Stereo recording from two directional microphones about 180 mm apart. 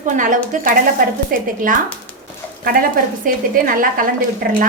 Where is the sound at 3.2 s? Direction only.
50° right (ahead or behind).